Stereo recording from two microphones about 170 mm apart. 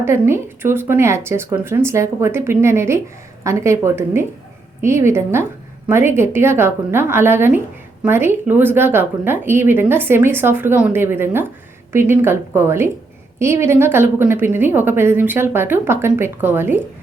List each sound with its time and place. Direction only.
0.0 s speech: 15° right (ahead or behind)